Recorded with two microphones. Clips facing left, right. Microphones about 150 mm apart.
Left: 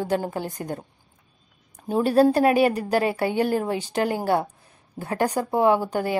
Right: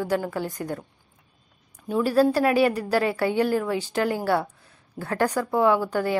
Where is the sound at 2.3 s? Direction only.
25° left (ahead or behind).